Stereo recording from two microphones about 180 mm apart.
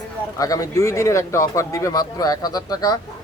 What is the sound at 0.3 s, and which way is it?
Speech, 20° left (ahead or behind).